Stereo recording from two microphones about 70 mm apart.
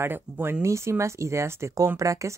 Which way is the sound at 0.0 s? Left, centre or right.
Right.